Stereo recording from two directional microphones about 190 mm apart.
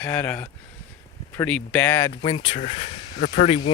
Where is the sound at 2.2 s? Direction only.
30° left (ahead or behind).